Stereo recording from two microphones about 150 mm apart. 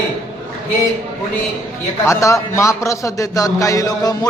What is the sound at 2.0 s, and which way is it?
A man's voice, 20° left (ahead or behind).